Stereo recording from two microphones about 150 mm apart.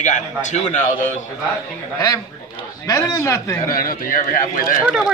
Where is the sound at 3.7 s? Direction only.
70° left (ahead or behind).